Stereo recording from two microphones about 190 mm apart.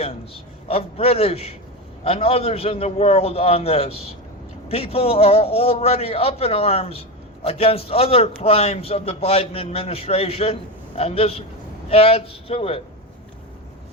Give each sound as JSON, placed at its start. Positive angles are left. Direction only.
{"t": 0.7, "sound": "a man's voice", "side_deg": 30}